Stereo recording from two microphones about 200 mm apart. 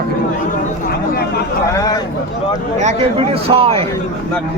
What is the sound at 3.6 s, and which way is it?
Speech, 30° right (ahead or behind).